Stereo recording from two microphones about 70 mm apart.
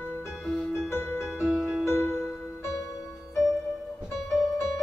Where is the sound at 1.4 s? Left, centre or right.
Centre.